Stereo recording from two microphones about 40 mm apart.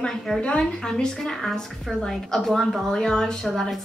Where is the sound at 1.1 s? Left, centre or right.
Centre.